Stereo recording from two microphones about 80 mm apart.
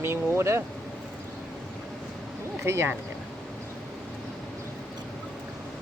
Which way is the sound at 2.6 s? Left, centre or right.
Right.